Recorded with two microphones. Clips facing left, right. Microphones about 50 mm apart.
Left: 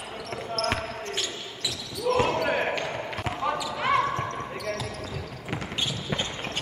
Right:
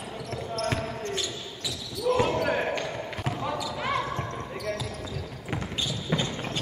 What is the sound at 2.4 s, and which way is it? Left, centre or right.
Basketball bounce, left.